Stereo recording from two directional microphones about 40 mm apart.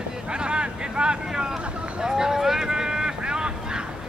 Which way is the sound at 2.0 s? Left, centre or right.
Centre.